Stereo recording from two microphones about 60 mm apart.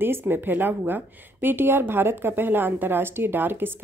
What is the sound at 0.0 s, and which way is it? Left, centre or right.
A woman's voice, right.